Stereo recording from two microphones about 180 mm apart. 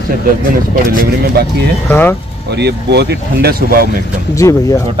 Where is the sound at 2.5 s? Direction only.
70° right (ahead or behind).